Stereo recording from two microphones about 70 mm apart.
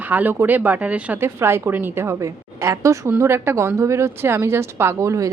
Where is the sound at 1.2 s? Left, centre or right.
Right.